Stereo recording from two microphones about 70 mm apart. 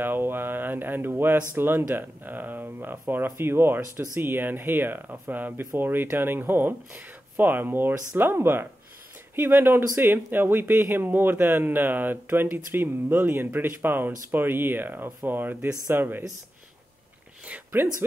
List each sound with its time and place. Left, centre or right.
0.0 s speech: right